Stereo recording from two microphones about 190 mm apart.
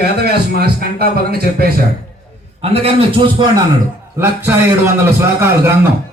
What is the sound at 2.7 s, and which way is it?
Speech, 30° right (ahead or behind).